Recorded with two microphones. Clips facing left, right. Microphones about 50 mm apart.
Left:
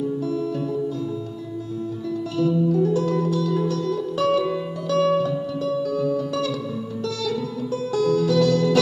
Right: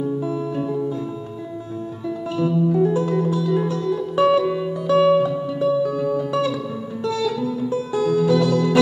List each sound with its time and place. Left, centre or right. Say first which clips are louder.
0.3 s music: right 1 dB; right
2.0 s music: right 1 dB; right